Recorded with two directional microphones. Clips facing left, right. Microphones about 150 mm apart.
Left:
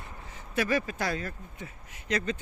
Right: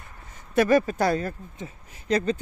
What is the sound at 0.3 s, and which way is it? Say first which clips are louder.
Speech: right 9 dB; 45° right (ahead or behind).